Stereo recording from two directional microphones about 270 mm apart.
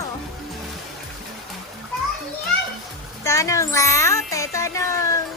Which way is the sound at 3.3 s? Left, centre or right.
Centre.